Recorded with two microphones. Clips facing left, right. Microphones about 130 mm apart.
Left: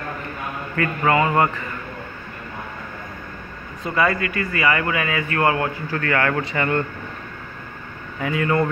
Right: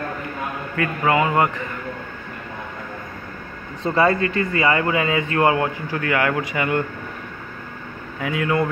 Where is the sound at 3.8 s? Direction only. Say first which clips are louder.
Right 3 dB; 30° right (ahead or behind); by 6.9 s 10° right (ahead or behind).